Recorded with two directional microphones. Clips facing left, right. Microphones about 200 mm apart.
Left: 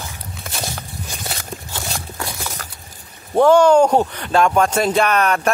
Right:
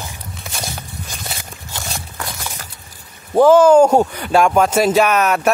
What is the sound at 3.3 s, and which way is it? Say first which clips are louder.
Speech: right 2 dB; 5° right (ahead or behind).